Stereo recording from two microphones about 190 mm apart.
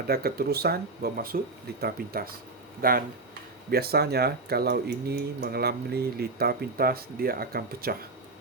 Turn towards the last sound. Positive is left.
turn(degrees=-50)  # may be behind; listen again after turning